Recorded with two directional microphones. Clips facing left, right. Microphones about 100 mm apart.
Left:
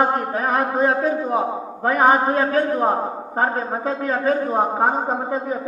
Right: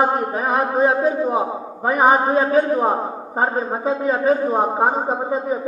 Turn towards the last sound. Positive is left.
turn(degrees=-15)  # may be behind; listen again after turning